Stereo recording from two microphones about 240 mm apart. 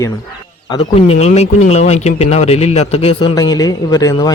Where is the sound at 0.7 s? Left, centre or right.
Left.